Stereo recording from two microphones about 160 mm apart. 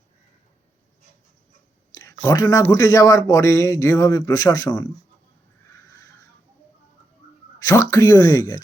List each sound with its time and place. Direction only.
2.2 s a man's voice: 20° left (ahead or behind)
7.6 s a man's voice: 20° left (ahead or behind)